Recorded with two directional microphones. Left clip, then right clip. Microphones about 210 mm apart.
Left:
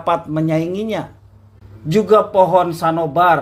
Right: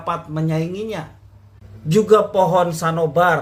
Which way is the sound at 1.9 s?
10° left (ahead or behind).